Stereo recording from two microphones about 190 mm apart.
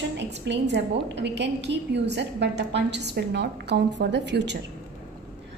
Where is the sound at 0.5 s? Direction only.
65° right (ahead or behind).